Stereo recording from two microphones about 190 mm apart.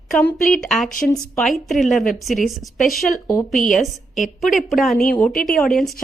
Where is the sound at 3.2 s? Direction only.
20° left (ahead or behind).